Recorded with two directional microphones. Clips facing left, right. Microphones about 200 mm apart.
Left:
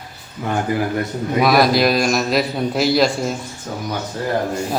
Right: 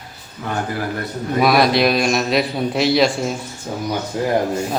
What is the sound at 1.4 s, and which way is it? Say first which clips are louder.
A man's voice: even; centre (ahead or behind).